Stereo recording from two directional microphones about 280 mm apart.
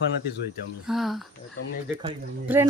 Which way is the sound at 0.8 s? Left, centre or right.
Centre.